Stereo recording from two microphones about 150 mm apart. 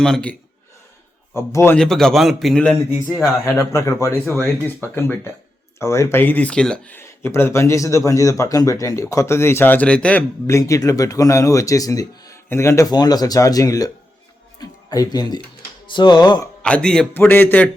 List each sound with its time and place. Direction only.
0.0 s a man's voice: 5° left (ahead or behind)
1.4 s speech: 15° left (ahead or behind)
1.8 s a man's voice: 5° left (ahead or behind)
2.9 s speech: 10° right (ahead or behind)
3.4 s speech: 20° left (ahead or behind)
10.4 s speech: 20° left (ahead or behind)
16.6 s speech: 5° left (ahead or behind)